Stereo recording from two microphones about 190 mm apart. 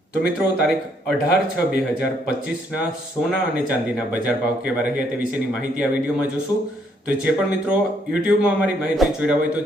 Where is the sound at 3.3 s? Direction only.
5° right (ahead or behind).